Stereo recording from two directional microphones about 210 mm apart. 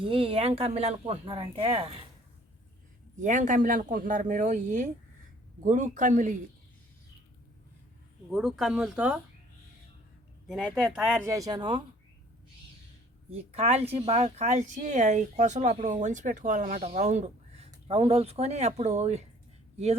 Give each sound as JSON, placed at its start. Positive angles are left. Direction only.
{"t": 0.0, "sound": "speech", "side_deg": -25}
{"t": 3.2, "sound": "speech", "side_deg": -35}
{"t": 8.3, "sound": "speech", "side_deg": 0}
{"t": 10.4, "sound": "speech", "side_deg": 0}
{"t": 13.3, "sound": "speech", "side_deg": -30}